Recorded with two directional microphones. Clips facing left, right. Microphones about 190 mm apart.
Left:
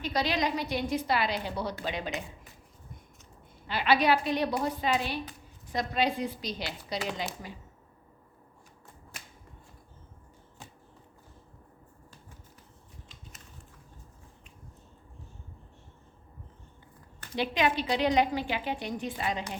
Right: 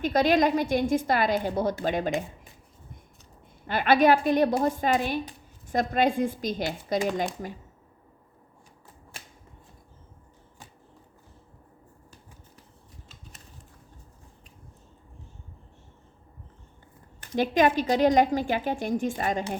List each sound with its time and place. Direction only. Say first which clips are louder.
0.0 s a woman's voice: right 8 dB; 50° right (ahead or behind)
3.7 s a woman's voice: right 5 dB; 50° right (ahead or behind)
17.3 s a woman's voice: right 6 dB; 45° right (ahead or behind)